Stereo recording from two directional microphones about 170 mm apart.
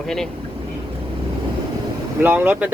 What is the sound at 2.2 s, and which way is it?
Speech, 10° right (ahead or behind).